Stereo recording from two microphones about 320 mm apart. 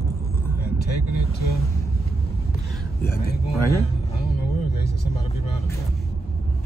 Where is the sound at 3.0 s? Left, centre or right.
Left.